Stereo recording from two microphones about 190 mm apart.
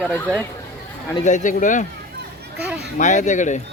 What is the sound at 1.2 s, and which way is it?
Speech, 40° left (ahead or behind).